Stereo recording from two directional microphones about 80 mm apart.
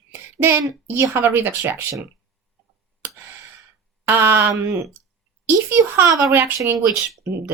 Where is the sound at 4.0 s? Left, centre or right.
Right.